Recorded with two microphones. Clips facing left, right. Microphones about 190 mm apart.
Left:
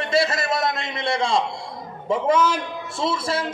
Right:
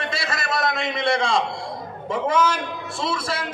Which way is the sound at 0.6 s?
70° right (ahead or behind).